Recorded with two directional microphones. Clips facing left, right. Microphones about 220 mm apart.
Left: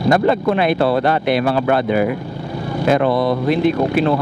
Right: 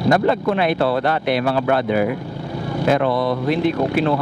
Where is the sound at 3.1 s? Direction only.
30° left (ahead or behind).